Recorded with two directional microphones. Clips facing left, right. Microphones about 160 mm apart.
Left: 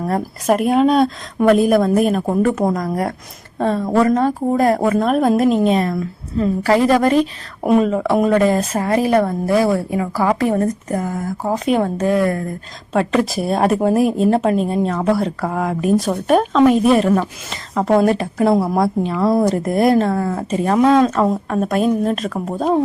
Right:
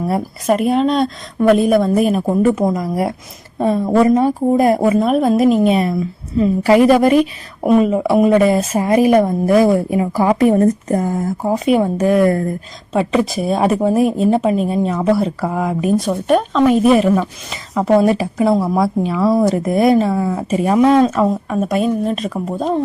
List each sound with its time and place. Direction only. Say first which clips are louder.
0.4 s a woman's voice: even; centre (ahead or behind); by 10.6 s 20° right (ahead or behind)
10.6 s speech: right 5 dB; 30° right (ahead or behind)
11.4 s a woman's voice: right 2 dB; 10° right (ahead or behind)
12.9 s a woman's voice: right 1 dB; centre (ahead or behind)